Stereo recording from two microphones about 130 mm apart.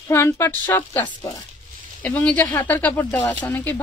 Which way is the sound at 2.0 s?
10° left (ahead or behind).